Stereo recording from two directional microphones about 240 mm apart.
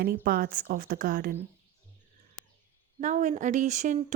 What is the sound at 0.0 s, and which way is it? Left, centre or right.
Speech, right.